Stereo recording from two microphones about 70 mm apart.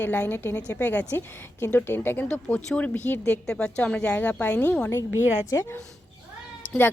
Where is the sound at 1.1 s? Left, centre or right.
Left.